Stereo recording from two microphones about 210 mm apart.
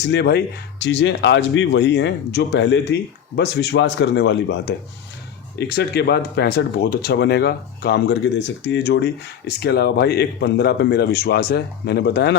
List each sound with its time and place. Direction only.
0.0 s speech: 55° left (ahead or behind)